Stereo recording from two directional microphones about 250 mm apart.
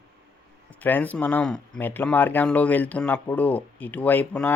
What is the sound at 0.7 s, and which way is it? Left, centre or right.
Speech, centre.